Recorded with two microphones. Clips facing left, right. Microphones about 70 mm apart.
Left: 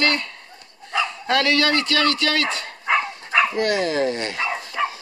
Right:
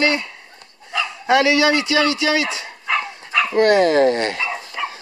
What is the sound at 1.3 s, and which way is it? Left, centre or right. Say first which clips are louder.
A man's voice: right 5 dB; centre.